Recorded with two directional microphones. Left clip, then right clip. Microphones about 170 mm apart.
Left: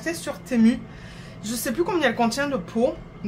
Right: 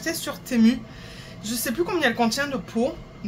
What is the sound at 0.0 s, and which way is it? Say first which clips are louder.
Speech: even; centre (ahead or behind).